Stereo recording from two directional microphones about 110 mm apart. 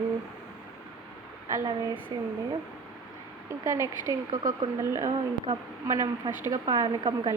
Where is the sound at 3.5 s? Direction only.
30° right (ahead or behind).